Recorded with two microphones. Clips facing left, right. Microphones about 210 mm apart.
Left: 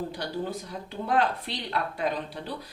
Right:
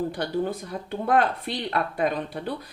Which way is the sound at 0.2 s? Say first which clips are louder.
Right 5 dB; 55° right (ahead or behind).